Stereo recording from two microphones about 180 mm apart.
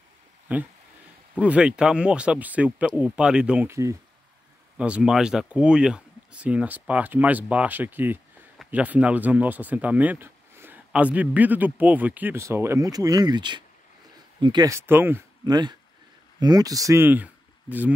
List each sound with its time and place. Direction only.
0.5 s speech: 10° right (ahead or behind)
15.5 s speech: 25° right (ahead or behind)